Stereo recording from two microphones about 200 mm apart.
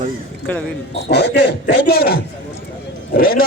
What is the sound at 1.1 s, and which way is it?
A man's voice, 55° left (ahead or behind).